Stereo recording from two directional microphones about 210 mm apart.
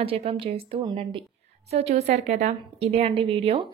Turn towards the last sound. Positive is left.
turn(degrees=-25)  # may be behind; listen again after turning